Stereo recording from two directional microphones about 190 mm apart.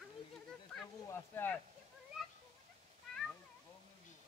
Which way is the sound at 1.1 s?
10° left (ahead or behind).